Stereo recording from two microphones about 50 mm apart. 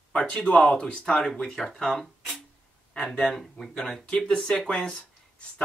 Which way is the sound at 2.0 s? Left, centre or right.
Centre.